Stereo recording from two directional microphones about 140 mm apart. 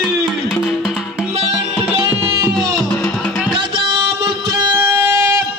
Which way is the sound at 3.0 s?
Centre (ahead or behind).